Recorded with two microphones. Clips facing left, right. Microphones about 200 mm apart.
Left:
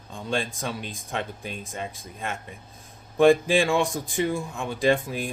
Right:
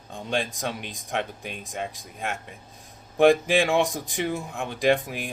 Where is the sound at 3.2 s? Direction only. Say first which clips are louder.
Even; 15° right (ahead or behind).